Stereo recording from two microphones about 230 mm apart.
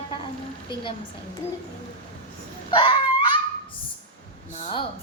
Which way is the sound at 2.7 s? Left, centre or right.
Centre.